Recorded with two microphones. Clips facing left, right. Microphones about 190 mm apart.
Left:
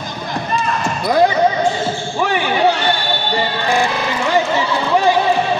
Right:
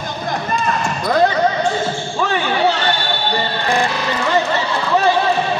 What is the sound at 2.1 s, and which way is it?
Basketball bounce, 10° left (ahead or behind).